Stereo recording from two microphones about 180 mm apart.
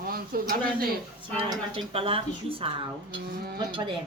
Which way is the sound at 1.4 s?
30° right (ahead or behind).